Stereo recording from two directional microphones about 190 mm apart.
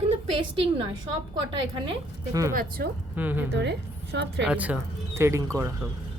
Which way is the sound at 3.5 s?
65° right (ahead or behind).